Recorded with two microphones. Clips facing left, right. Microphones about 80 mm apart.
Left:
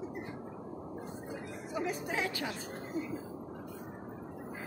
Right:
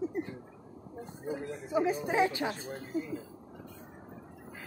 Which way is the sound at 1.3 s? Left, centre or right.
Right.